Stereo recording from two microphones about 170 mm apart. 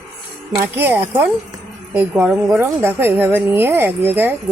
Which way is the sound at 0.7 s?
10° right (ahead or behind).